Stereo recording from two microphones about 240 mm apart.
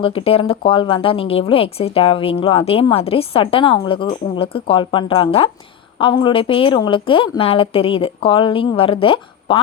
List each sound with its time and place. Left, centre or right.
0.0 s speech: left